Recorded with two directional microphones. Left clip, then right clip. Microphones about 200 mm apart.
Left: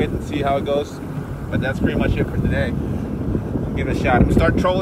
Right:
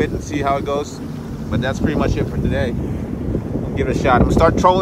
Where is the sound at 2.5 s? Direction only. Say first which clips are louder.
Right 3 dB; 90° right.